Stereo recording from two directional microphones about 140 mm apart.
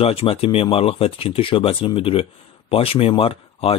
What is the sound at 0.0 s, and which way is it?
Speech, 45° left (ahead or behind).